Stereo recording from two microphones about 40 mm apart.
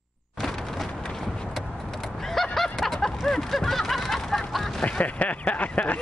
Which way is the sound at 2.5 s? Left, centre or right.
Centre.